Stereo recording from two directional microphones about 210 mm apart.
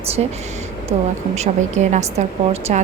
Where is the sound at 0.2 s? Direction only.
30° right (ahead or behind).